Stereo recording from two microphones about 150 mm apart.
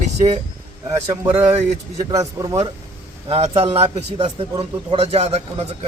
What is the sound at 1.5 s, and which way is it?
Speech, 45° right (ahead or behind).